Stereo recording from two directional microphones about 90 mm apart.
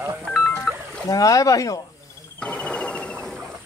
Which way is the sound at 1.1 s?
40° left (ahead or behind).